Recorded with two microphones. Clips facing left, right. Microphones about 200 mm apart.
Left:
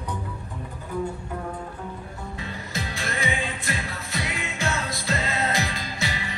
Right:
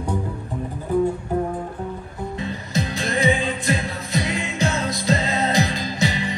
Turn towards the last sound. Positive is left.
turn(degrees=-20)  # may be behind; listen again after turning